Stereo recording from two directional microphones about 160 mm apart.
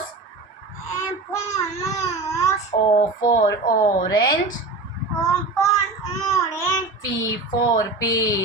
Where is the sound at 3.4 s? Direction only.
20° left (ahead or behind).